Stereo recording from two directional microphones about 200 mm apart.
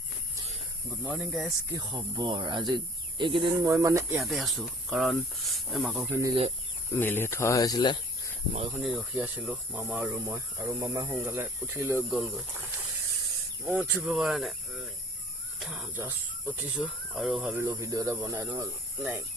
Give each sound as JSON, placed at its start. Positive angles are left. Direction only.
{"t": 0.9, "sound": "speech", "side_deg": 0}
{"t": 1.7, "sound": "speech", "side_deg": -15}
{"t": 4.2, "sound": "speech", "side_deg": 0}
{"t": 6.9, "sound": "speech", "side_deg": 10}
{"t": 8.7, "sound": "speech", "side_deg": 0}
{"t": 13.7, "sound": "speech", "side_deg": -5}